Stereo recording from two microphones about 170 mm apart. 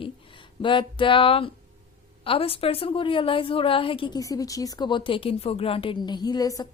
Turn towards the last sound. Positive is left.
turn(degrees=20)  # may be behind; listen again after turning